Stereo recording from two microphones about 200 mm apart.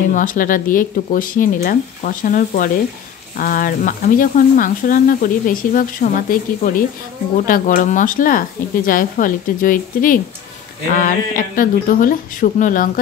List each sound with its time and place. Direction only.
0.1 s speech: 40° left (ahead or behind)